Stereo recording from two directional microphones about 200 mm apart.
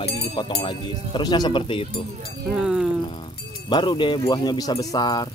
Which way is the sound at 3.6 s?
25° left (ahead or behind).